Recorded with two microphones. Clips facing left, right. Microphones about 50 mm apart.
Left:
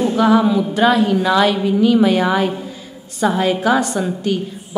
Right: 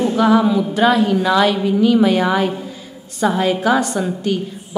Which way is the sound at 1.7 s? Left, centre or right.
Left.